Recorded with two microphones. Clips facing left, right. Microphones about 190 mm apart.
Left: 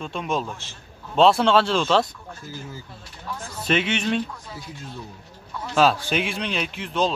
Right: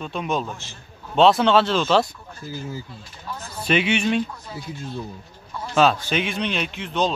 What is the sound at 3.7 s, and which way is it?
Speech, 5° right (ahead or behind).